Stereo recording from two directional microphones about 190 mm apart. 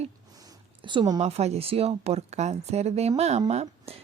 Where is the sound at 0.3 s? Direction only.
20° right (ahead or behind).